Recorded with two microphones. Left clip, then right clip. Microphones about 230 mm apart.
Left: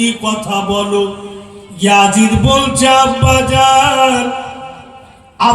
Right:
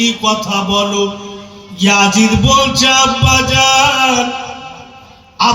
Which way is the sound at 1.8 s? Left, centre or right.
Right.